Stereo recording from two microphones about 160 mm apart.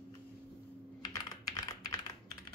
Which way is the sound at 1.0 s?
25° left (ahead or behind).